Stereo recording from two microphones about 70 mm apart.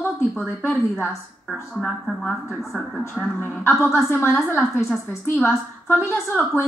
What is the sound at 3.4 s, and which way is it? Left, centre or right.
Speech, left.